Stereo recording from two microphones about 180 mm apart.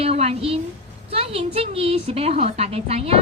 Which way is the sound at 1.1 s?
35° right (ahead or behind).